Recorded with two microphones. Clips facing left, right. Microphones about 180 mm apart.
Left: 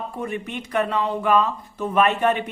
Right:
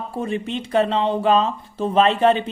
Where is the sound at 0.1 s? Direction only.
25° right (ahead or behind).